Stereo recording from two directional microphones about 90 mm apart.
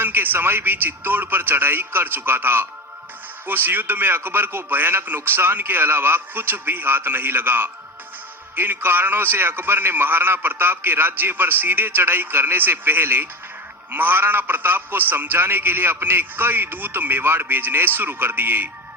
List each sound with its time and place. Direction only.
0.0 s a man's voice: 20° right (ahead or behind)